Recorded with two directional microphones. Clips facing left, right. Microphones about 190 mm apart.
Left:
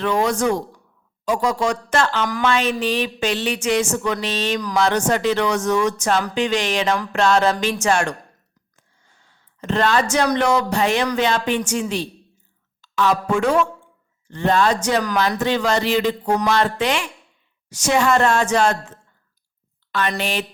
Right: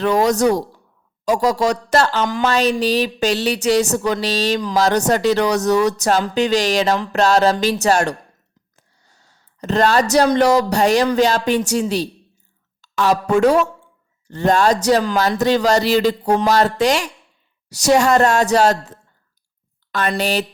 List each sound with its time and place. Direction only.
0.0 s a woman's voice: 40° right (ahead or behind)
8.7 s a sound: 40° right (ahead or behind)
10.3 s a woman's voice: 35° right (ahead or behind)